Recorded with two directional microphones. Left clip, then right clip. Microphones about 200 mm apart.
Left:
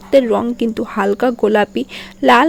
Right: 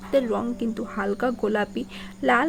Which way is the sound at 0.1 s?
35° left (ahead or behind).